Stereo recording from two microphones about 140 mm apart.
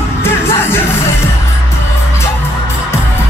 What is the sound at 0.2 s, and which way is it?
Music, 15° left (ahead or behind).